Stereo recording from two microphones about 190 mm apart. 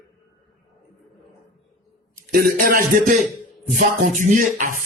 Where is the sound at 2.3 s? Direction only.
55° right (ahead or behind).